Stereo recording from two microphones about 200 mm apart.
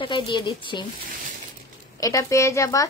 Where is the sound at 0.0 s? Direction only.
25° left (ahead or behind).